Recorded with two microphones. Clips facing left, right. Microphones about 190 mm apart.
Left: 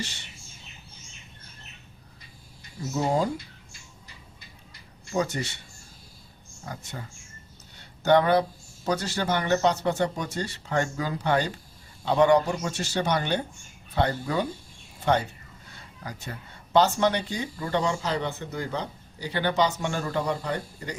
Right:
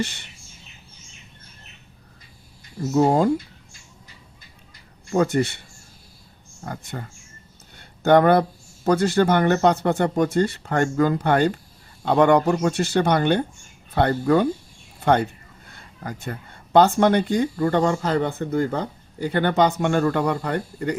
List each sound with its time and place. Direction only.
0.0 s speech: 55° right (ahead or behind)
2.9 s speech: 55° right (ahead or behind)
5.1 s speech: 55° right (ahead or behind)
6.7 s speech: 55° right (ahead or behind)